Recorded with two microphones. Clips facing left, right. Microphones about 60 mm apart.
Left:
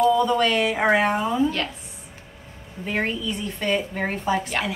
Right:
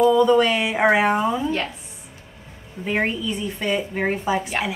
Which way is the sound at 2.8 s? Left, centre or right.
Right.